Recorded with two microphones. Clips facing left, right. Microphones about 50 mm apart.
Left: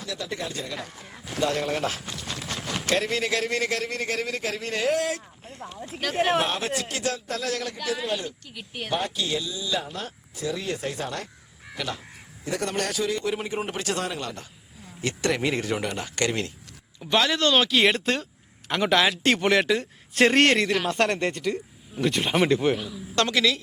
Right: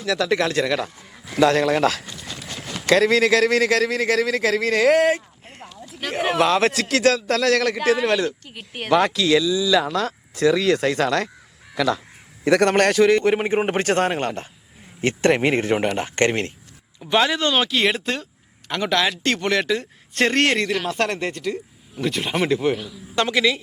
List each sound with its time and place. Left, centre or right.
0.1 s speech: right
3.7 s speech: right
5.1 s a sound: right
6.1 s speech: right
7.9 s speech: right
8.5 s speech: right
8.9 s speech: right
12.5 s a man's voice: right
17.1 s speech: centre
17.5 s a man's voice: centre
23.1 s speech: centre